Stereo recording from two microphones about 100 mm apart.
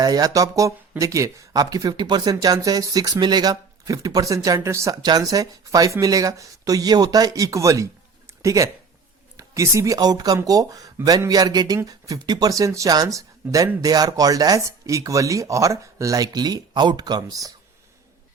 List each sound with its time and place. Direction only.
0.0 s speech: 40° right (ahead or behind)
8.3 s a sound: 30° right (ahead or behind)
9.4 s speech: 30° right (ahead or behind)